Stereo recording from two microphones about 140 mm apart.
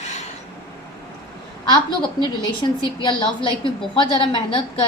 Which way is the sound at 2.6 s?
30° left (ahead or behind).